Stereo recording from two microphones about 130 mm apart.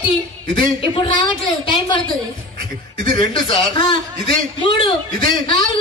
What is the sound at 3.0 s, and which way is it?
A man's voice, 35° left (ahead or behind).